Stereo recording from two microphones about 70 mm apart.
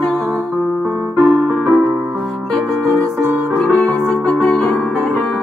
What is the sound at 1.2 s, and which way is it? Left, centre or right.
Keyboard, right.